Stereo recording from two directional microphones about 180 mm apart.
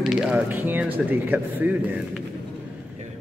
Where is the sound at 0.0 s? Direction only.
5° right (ahead or behind).